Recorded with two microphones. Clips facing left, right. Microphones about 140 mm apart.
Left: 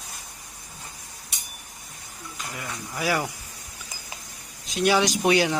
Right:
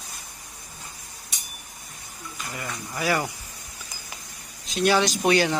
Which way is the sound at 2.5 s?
5° left (ahead or behind).